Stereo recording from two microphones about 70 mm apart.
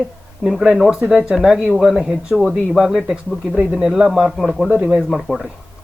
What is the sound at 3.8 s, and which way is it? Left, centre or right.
Speech, centre.